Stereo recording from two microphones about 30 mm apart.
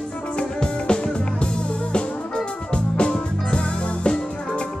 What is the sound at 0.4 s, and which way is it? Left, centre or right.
Music, left.